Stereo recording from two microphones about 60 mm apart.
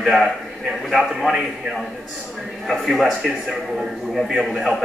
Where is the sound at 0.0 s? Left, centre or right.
Centre.